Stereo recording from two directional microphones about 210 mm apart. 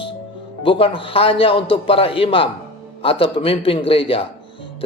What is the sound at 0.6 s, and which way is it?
A man's voice, 25° left (ahead or behind).